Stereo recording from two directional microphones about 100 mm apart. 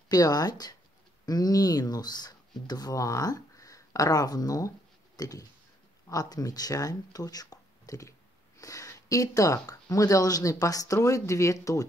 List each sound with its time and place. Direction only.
0.1 s speech: 40° left (ahead or behind)